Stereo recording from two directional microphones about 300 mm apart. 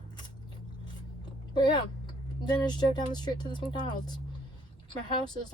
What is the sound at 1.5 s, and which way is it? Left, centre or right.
Speech, centre.